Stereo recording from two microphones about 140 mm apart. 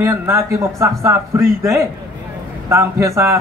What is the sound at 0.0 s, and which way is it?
A man's voice, 20° right (ahead or behind).